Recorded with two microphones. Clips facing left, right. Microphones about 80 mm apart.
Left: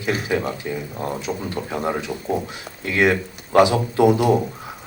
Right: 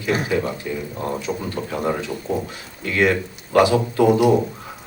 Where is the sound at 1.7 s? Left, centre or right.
Centre.